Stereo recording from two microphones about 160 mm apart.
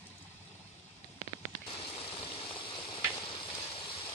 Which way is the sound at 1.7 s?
35° left (ahead or behind).